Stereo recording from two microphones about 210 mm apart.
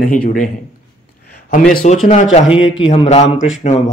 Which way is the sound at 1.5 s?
45° left (ahead or behind).